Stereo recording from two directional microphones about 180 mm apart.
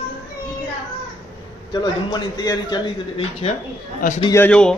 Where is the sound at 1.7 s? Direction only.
25° left (ahead or behind).